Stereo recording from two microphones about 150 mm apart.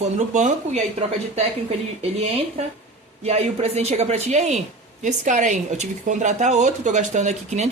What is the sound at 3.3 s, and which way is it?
Speech, 45° right (ahead or behind).